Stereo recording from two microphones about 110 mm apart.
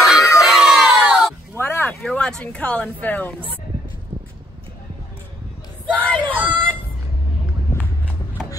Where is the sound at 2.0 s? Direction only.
5° left (ahead or behind).